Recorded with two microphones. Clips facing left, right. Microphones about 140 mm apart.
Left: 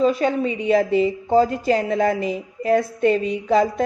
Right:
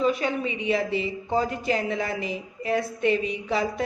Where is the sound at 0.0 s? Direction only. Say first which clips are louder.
Left 6 dB; 40° left (ahead or behind).